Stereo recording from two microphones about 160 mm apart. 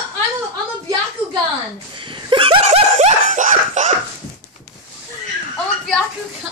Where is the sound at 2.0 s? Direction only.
30° right (ahead or behind); by 3.9 s 50° right (ahead or behind).